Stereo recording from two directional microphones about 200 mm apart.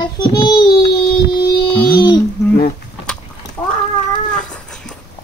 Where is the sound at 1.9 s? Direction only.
20° left (ahead or behind).